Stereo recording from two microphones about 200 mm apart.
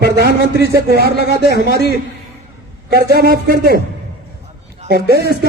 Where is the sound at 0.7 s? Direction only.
50° right (ahead or behind).